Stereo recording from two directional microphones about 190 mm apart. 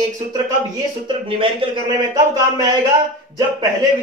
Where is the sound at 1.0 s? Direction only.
25° right (ahead or behind).